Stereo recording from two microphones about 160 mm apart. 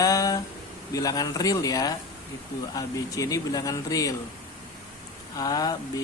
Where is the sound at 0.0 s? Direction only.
20° left (ahead or behind).